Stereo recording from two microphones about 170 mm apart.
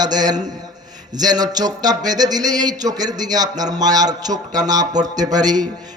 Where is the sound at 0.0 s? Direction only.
25° right (ahead or behind).